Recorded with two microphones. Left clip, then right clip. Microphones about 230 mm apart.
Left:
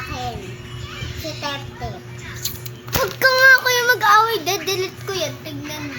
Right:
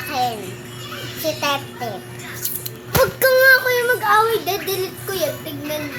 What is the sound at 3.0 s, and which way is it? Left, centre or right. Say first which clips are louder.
Child singing: even; left.